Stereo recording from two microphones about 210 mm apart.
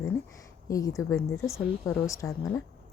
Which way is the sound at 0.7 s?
15° left (ahead or behind).